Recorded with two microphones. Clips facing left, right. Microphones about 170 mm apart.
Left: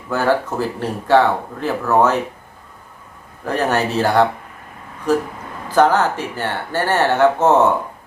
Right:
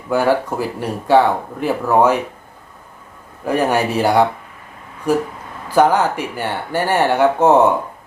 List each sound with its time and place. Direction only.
0.1 s speech: 15° right (ahead or behind)
3.4 s speech: 10° right (ahead or behind)